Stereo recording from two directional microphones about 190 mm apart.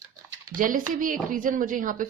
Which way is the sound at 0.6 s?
45° right (ahead or behind).